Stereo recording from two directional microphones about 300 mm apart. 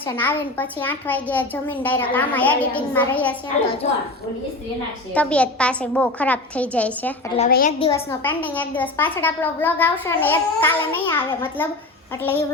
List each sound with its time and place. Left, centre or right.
0.0 s a child's voice: centre
3.6 s a woman's voice: left
5.1 s a child's voice: centre
7.3 s a woman's voice: left
8.2 s a woman's voice: centre